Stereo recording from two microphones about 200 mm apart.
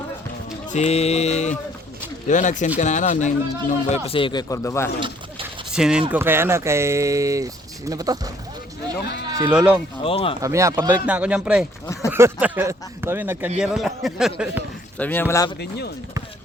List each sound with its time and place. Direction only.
0.7 s mantra: 35° left (ahead or behind)
3.8 s speech: 30° left (ahead or behind); by 4.9 s 15° left (ahead or behind)
5.7 s speech: 5° right (ahead or behind)
9.0 s speech: 55° left (ahead or behind)
9.3 s speech: 10° right (ahead or behind)
10.0 s speech: 25° left (ahead or behind)
10.4 s speech: 15° right (ahead or behind)
14.9 s speech: 10° left (ahead or behind)